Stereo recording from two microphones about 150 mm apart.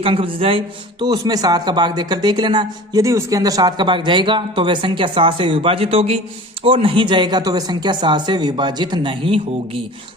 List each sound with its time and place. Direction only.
0.0 s a man's voice: 35° right (ahead or behind)